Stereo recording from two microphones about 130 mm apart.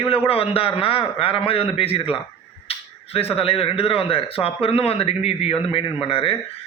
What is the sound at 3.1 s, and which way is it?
A man's voice, 45° left (ahead or behind).